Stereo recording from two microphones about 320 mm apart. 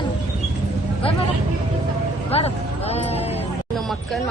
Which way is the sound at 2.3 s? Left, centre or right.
Centre.